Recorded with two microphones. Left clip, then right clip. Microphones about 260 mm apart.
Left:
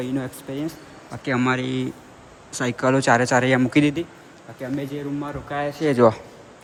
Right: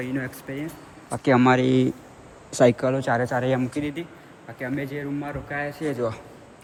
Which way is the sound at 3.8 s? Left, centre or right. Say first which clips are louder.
Left 9 dB; left.